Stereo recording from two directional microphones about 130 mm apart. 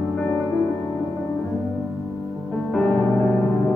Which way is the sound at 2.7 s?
Centre (ahead or behind).